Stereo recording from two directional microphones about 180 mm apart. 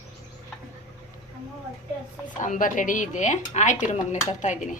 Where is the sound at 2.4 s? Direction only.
45° left (ahead or behind).